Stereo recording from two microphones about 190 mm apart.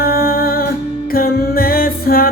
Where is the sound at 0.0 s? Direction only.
50° left (ahead or behind).